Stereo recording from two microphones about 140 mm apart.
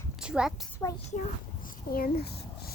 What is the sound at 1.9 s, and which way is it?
Speech, 90° left.